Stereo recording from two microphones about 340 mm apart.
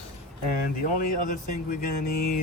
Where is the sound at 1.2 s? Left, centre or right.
Left.